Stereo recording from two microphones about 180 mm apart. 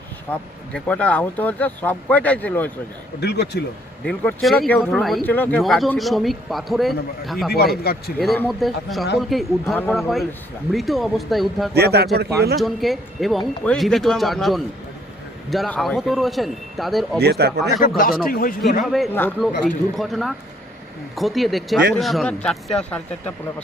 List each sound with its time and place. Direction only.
0.3 s speech: 5° left (ahead or behind)
3.2 s speech: 65° left (ahead or behind)
4.0 s speech: 5° left (ahead or behind)
7.5 s speech: 60° left (ahead or behind)
8.4 s speech: centre (ahead or behind)
11.7 s speech: 65° right (ahead or behind)
12.5 s speech: centre (ahead or behind)
17.2 s speech: 65° right (ahead or behind)
17.7 s speech: 50° left (ahead or behind)
18.9 s speech: centre (ahead or behind)